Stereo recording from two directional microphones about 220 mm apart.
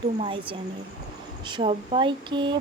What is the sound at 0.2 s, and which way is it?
Speech, 25° right (ahead or behind).